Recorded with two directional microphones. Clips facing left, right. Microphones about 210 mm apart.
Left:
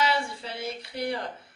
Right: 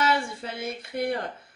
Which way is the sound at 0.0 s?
50° right (ahead or behind).